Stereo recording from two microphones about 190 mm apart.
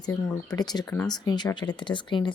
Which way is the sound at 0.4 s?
20° left (ahead or behind).